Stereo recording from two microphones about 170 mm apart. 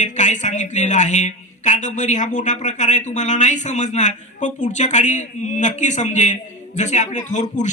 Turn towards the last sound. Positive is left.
turn(degrees=45)  # may be behind; listen again after turning